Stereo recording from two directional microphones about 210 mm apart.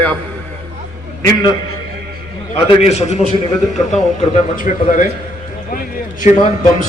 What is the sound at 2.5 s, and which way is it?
Speech, 30° left (ahead or behind).